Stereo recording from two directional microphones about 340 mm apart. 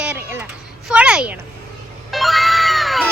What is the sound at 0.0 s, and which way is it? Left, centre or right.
Children playing, centre.